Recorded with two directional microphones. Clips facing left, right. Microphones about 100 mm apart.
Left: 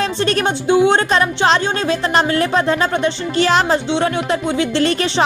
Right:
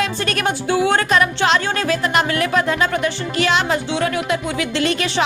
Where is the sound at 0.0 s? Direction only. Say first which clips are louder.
Left 3 dB; 30° left (ahead or behind).